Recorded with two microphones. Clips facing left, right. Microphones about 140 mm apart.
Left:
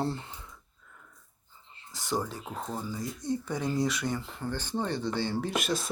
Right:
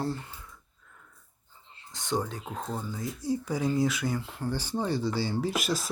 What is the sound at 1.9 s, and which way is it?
Speech, 5° left (ahead or behind).